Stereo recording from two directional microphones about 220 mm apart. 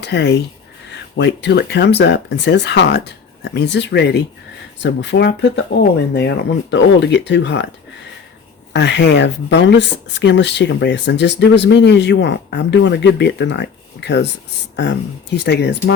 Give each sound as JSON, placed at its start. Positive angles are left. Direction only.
{"t": 0.0, "sound": "speech", "side_deg": 50}
{"t": 8.7, "sound": "speech", "side_deg": 50}